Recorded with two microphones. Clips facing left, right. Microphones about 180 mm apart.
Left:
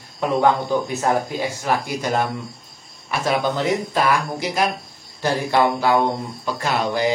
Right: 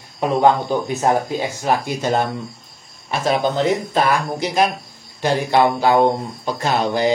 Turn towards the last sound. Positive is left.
turn(degrees=-30)  # may be behind; listen again after turning